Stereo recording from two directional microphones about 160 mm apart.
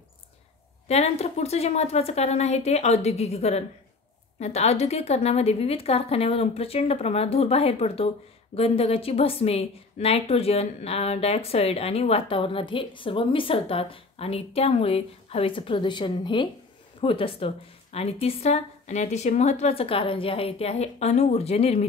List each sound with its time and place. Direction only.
0.8 s a woman's voice: 40° left (ahead or behind)